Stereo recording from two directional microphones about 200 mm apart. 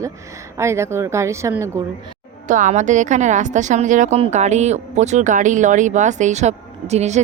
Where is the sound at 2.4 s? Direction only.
40° right (ahead or behind).